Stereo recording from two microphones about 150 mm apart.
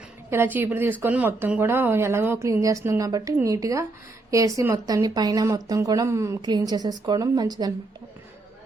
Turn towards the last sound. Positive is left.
turn(degrees=-25)  # may be behind; listen again after turning